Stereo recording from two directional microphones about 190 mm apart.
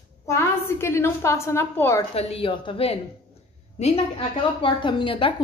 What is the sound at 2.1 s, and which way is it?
A woman's voice, 30° left (ahead or behind).